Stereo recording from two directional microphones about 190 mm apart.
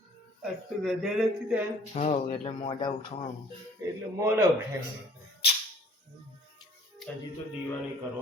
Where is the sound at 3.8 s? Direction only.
15° right (ahead or behind).